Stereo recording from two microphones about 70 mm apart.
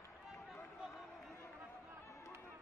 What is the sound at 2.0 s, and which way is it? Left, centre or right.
Chatter, left.